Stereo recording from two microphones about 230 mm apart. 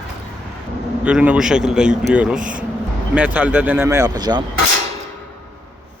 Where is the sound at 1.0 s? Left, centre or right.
Centre.